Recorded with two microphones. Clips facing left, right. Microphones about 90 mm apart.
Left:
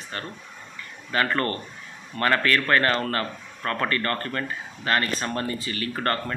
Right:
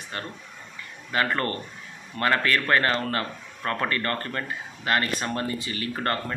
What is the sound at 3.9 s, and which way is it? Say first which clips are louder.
Speech: left 1 dB; 20° right (ahead or behind).